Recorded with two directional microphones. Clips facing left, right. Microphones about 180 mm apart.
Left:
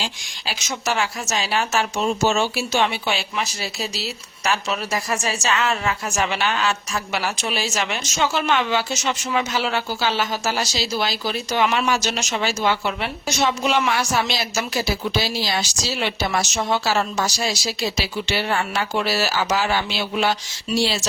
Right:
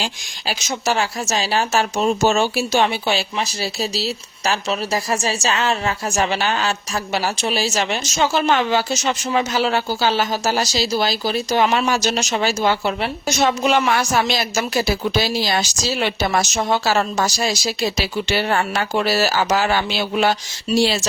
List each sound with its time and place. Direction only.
0.9 s speech: 35° right (ahead or behind)